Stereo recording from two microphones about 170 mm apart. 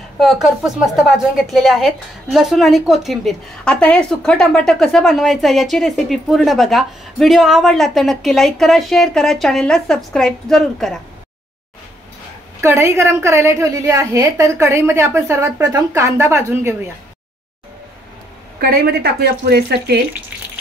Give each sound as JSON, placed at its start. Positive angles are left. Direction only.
{"t": 0.2, "sound": "a woman's voice", "side_deg": 0}
{"t": 12.6, "sound": "a woman's voice", "side_deg": -15}
{"t": 18.6, "sound": "a woman's voice", "side_deg": -70}